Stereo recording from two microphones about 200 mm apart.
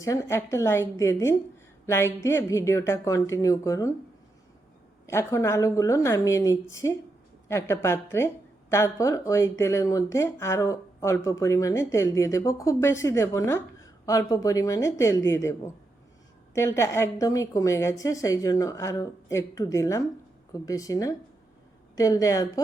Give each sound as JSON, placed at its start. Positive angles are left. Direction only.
{"t": 0.0, "sound": "speech", "side_deg": 15}
{"t": 5.0, "sound": "speech", "side_deg": 15}